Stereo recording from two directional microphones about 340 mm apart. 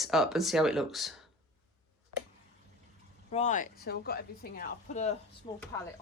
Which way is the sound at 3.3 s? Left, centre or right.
Left.